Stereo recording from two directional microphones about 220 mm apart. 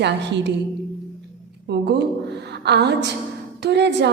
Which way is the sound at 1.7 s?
50° right (ahead or behind).